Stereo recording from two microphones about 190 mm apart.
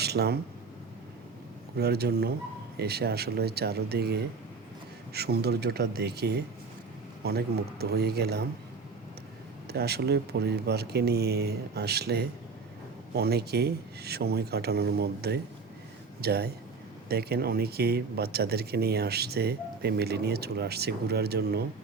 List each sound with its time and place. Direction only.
0.0 s speech: 60° right (ahead or behind)
1.8 s speech: 55° right (ahead or behind)
9.6 s speech: 55° right (ahead or behind)